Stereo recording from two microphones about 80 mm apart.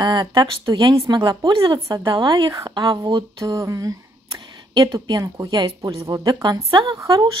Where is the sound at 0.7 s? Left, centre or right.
Right.